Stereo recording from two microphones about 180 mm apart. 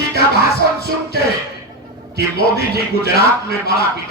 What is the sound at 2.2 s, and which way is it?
A man's voice, 60° left (ahead or behind).